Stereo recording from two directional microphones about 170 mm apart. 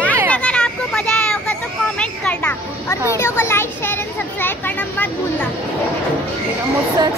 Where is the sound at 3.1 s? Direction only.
15° left (ahead or behind).